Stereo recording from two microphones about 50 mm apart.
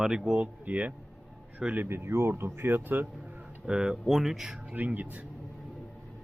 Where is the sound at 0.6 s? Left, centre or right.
Right.